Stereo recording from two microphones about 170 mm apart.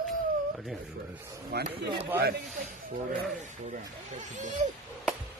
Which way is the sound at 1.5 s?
85° right.